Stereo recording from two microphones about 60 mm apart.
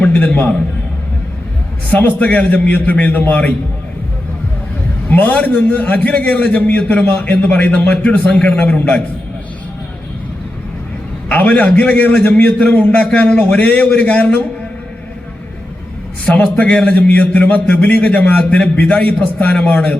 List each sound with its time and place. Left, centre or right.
0.0 s a man's voice: left
1.9 s a man's voice: left
5.1 s a man's voice: left
11.3 s a man's voice: left
16.2 s a man's voice: left